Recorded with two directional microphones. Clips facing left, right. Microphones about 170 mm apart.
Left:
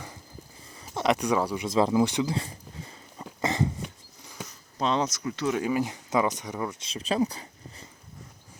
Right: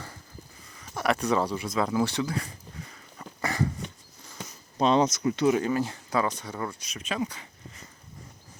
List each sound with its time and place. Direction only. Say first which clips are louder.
0.7 s speech: left 2 dB; 25° left (ahead or behind)
1.6 s a sound: left 4 dB; 25° left (ahead or behind)
3.4 s dog: left 2 dB; 20° left (ahead or behind)
3.8 s a sound: even; 10° left (ahead or behind)
4.8 s speech: right 4 dB; 20° right (ahead or behind)
5.6 s speech: even; 15° left (ahead or behind); by 7.4 s 35° left (ahead or behind)